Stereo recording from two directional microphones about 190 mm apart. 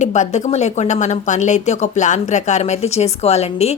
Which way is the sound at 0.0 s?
40° left (ahead or behind).